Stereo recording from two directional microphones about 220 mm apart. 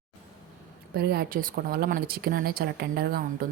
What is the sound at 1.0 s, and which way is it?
Speech, 45° right (ahead or behind).